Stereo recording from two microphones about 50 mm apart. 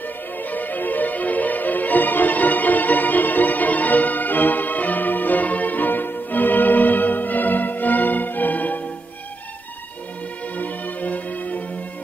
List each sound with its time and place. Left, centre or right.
0.4 s music: left
10.5 s music: left